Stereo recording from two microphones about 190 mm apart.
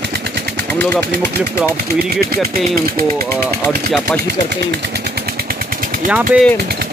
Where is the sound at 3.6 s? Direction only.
10° left (ahead or behind).